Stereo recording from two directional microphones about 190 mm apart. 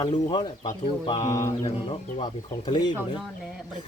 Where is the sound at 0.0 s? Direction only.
25° left (ahead or behind).